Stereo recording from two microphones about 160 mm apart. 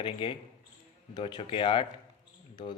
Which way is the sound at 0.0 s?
30° left (ahead or behind).